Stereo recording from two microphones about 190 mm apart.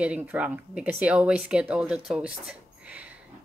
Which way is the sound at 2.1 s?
Centre (ahead or behind).